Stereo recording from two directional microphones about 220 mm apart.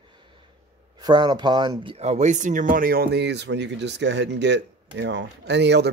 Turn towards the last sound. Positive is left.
turn(degrees=-50)  # may be behind; listen again after turning